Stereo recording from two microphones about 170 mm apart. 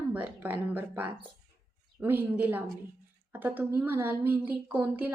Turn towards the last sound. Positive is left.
turn(degrees=-10)  # may be behind; listen again after turning